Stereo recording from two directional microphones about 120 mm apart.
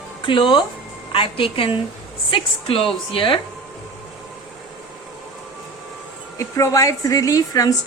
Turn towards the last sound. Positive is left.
turn(degrees=30)  # may be behind; listen again after turning